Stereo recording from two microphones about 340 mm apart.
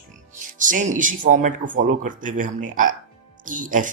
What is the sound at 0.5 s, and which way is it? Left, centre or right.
Speech, right.